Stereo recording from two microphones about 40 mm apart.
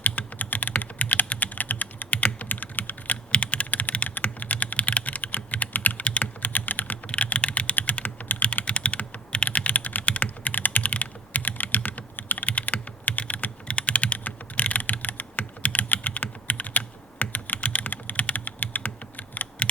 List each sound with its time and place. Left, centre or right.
0.0 s typing: left
2.1 s computer keyboard: left
3.3 s computer keyboard: left
4.2 s typing: left
6.1 s typing: left
6.5 s computer keyboard: left
7.3 s typing: left
8.6 s computer keyboard: left
9.3 s typing: left
12.5 s computer keyboard: left
13.7 s typing: left
17.6 s typing: left
17.8 s typing: left
18.2 s computer keyboard: left